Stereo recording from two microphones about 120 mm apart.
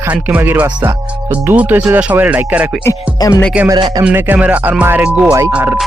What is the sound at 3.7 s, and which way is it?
Speech, 35° right (ahead or behind).